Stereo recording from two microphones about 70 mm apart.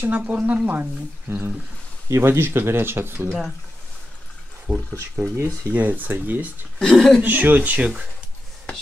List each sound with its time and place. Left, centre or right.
0.3 s speech: right
1.3 s speech: right
4.7 s speech: centre
5.1 s speech: right
5.8 s speech: right
6.8 s speech: centre
7.2 s speech: right